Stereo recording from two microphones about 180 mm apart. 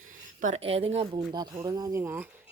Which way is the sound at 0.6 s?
35° right (ahead or behind).